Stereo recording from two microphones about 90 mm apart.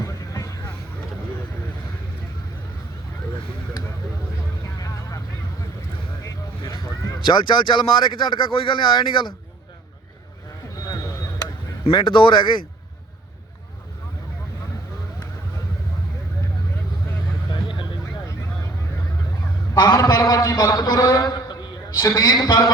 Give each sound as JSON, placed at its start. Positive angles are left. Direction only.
{"t": 0.0, "sound": "vehicle", "side_deg": 40}
{"t": 4.6, "sound": "vehicle", "side_deg": 35}
{"t": 7.3, "sound": "speech", "side_deg": 60}
{"t": 10.8, "sound": "a sound", "side_deg": 45}
{"t": 11.9, "sound": "speech", "side_deg": 65}
{"t": 17.5, "sound": "vehicle", "side_deg": 60}
{"t": 19.9, "sound": "a man's voice", "side_deg": 45}